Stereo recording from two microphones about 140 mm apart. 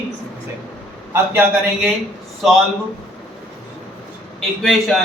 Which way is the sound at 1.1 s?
15° right (ahead or behind).